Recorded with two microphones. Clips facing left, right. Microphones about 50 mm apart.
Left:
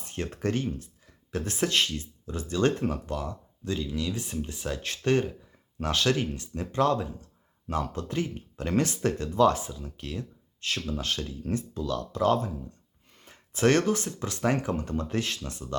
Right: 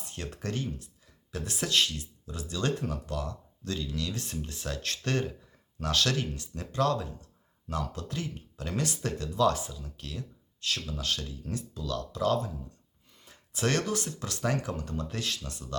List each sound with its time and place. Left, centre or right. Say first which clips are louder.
0.0 s speech: left 7 dB; left